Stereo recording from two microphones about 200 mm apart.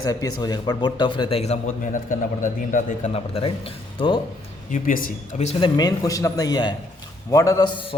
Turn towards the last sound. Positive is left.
turn(degrees=25)  # may be behind; listen again after turning